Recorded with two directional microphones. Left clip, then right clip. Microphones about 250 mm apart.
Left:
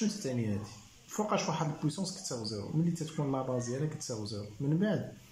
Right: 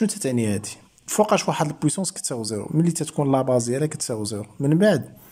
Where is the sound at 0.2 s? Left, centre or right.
Right.